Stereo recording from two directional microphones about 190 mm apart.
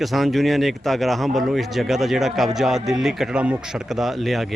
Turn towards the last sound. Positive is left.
turn(degrees=0)  # may be behind; listen again after turning